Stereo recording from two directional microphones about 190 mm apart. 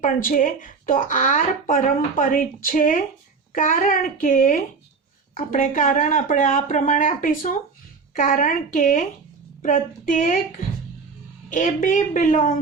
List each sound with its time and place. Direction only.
0.0 s speech: 45° left (ahead or behind)
11.4 s speech: 45° left (ahead or behind)